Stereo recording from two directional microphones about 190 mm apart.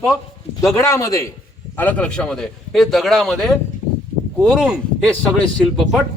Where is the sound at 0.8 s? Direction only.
15° left (ahead or behind); by 4.8 s 5° right (ahead or behind).